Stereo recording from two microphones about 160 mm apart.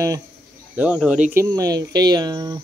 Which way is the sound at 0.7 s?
5° right (ahead or behind).